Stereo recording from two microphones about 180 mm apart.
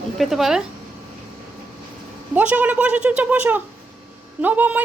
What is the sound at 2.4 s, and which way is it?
A child's voice, 10° right (ahead or behind).